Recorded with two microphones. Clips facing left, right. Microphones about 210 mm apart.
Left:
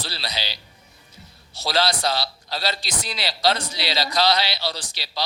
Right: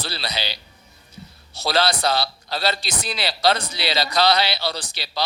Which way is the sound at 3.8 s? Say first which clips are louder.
Right 2 dB; 60° right (ahead or behind).